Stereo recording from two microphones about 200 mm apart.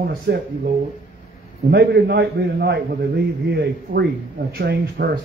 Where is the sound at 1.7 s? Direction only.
55° right (ahead or behind).